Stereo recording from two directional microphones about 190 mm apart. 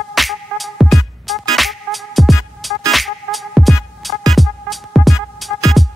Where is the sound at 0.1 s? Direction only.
Centre (ahead or behind).